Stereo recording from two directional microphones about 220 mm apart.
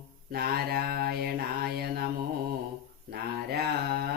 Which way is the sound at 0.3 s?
45° right (ahead or behind).